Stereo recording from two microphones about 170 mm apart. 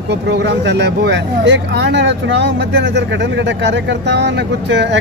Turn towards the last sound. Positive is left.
turn(degrees=-90)